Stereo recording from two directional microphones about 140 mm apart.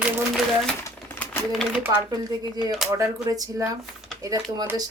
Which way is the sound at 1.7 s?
10° right (ahead or behind).